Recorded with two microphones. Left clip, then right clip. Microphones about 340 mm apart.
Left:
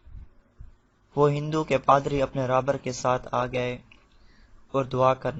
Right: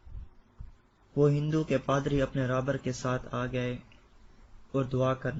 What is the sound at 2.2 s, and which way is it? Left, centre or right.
Speech, centre.